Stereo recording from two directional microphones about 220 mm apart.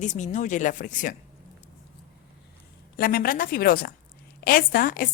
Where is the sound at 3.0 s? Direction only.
40° left (ahead or behind).